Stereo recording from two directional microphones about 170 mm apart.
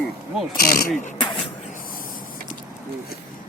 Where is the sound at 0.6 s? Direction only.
60° left (ahead or behind).